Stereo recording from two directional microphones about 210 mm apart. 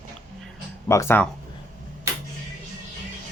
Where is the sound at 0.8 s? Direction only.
10° left (ahead or behind).